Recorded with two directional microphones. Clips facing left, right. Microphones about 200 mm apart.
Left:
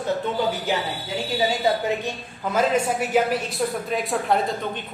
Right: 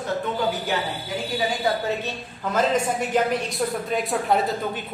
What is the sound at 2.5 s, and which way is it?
A woman's voice, 10° left (ahead or behind).